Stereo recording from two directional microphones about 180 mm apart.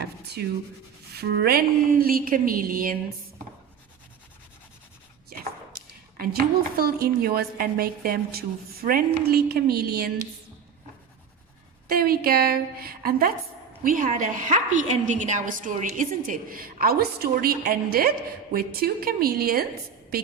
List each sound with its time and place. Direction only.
0.4 s a woman's voice: 60° right (ahead or behind)
6.7 s a woman's voice: 55° right (ahead or behind)
11.9 s a woman's voice: 55° right (ahead or behind)